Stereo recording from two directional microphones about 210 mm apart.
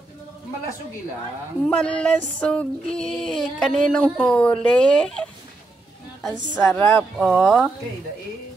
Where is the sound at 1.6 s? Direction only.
5° left (ahead or behind).